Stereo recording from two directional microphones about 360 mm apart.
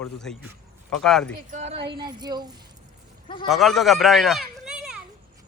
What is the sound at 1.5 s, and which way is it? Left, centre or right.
Speech, centre.